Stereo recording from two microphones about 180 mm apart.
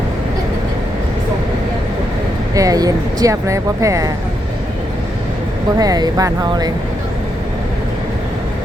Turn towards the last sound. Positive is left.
turn(degrees=-20)  # may be behind; listen again after turning